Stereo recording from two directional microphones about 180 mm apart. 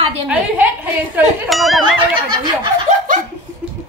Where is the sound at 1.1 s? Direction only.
Centre (ahead or behind).